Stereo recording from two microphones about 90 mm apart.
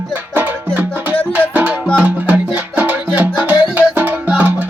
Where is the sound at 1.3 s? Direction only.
15° right (ahead or behind).